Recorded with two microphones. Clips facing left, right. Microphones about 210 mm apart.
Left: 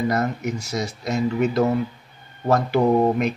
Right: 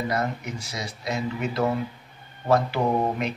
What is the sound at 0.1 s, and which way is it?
Speech, 45° left (ahead or behind).